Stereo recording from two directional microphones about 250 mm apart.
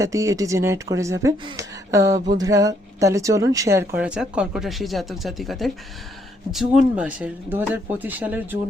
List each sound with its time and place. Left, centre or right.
0.0 s speech: centre
2.1 s speech: right
2.4 s speech: centre